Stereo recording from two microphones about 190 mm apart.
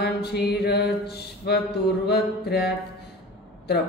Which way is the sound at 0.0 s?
60° left (ahead or behind).